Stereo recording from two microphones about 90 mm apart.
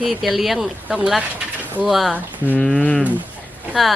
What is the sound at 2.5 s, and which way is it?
Speech, 15° left (ahead or behind).